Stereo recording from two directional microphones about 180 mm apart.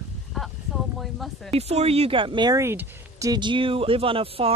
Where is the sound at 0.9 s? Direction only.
Centre (ahead or behind).